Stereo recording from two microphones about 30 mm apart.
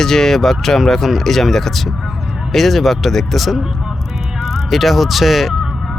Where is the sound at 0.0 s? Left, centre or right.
Centre.